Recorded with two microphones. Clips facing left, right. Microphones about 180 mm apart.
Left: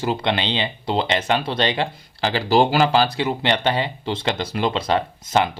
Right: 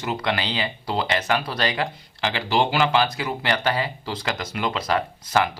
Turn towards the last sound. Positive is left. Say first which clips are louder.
# left 2 dB
turn(degrees=25)  # may be behind; listen again after turning